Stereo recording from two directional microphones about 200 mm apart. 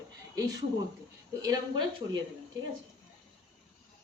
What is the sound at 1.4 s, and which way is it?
Speech, 20° right (ahead or behind).